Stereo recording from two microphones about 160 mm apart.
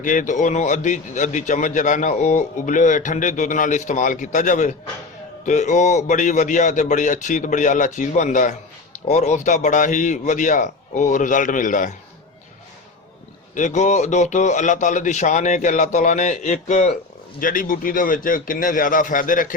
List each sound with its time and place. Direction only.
0.0 s speech: 55° left (ahead or behind)
13.6 s speech: 50° left (ahead or behind)
17.4 s a man's voice: 60° left (ahead or behind)